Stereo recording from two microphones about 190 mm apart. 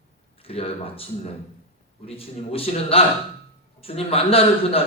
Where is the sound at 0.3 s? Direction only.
30° left (ahead or behind).